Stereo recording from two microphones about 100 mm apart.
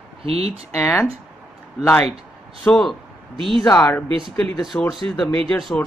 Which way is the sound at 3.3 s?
60° right (ahead or behind).